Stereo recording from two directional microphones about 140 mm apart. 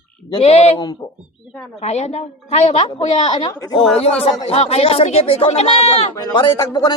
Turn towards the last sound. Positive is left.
turn(degrees=30)  # may be behind; listen again after turning